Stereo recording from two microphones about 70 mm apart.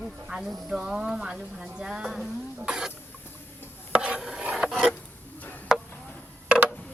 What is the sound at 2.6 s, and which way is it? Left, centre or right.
Cough, centre.